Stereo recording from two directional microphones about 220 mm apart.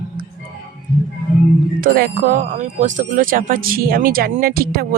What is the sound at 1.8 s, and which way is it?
Speech, 40° right (ahead or behind).